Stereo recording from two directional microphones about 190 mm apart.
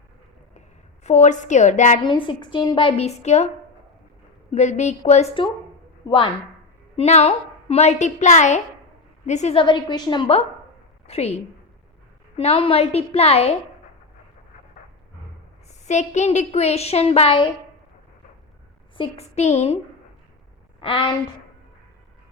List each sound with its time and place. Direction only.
1.0 s a woman's voice: 40° left (ahead or behind)
2.0 s a woman's voice: 25° left (ahead or behind)
4.5 s a woman's voice: 35° left (ahead or behind)
12.4 s a woman's voice: 30° left (ahead or behind)
15.9 s a woman's voice: 35° left (ahead or behind)
18.9 s a woman's voice: 35° left (ahead or behind)
20.8 s a woman's voice: 25° left (ahead or behind)